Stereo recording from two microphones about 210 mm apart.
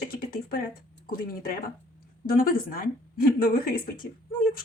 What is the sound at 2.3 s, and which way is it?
Speech, 45° left (ahead or behind).